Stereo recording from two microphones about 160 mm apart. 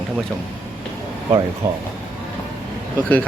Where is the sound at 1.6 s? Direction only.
20° right (ahead or behind).